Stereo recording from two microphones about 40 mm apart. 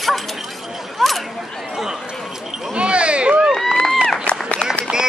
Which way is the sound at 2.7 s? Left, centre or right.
Right.